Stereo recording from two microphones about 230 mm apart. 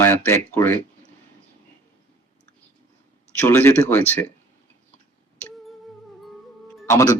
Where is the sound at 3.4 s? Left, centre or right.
Centre.